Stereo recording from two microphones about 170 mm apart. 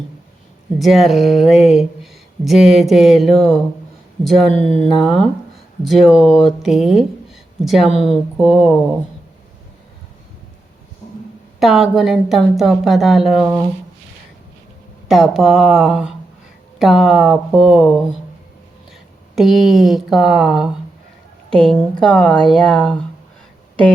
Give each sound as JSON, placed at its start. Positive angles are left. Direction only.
{"t": 0.8, "sound": "speech", "side_deg": 0}
{"t": 11.0, "sound": "a sound", "side_deg": 45}
{"t": 11.6, "sound": "speech", "side_deg": 0}
{"t": 15.0, "sound": "speech", "side_deg": 0}
{"t": 19.4, "sound": "a woman's voice", "side_deg": 0}